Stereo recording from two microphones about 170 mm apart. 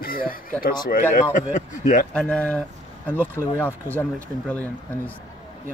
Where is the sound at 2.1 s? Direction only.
5° left (ahead or behind).